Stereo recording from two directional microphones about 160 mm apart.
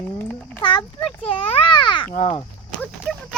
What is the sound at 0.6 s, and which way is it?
Speech, 30° left (ahead or behind).